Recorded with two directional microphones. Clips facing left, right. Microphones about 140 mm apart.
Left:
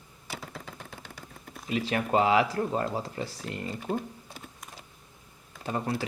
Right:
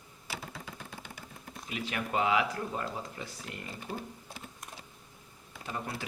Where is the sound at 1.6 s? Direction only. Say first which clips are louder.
Left 8 dB; 35° left (ahead or behind).